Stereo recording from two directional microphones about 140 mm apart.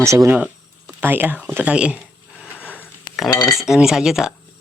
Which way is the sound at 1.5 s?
10° right (ahead or behind).